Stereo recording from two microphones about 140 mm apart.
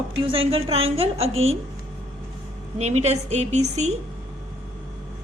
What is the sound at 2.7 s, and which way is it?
A woman's voice, 50° right (ahead or behind).